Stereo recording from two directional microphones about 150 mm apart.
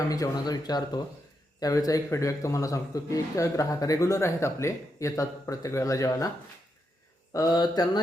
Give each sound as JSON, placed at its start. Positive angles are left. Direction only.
{"t": 0.1, "sound": "a man's voice", "side_deg": 25}
{"t": 7.3, "sound": "a man's voice", "side_deg": 25}